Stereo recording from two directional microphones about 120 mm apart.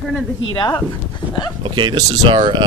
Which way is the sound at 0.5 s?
40° left (ahead or behind).